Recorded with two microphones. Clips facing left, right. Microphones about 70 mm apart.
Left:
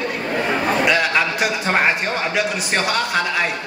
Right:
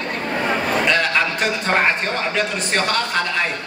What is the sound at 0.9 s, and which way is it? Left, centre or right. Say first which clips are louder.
A man's voice: left 1 dB; centre.